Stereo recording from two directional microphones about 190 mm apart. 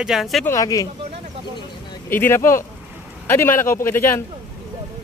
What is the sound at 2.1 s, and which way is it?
A man's voice, 10° left (ahead or behind).